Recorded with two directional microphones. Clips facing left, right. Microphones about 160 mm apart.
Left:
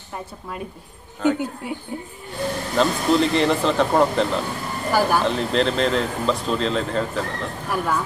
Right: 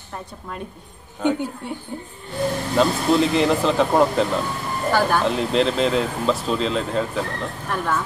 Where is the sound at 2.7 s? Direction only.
5° right (ahead or behind).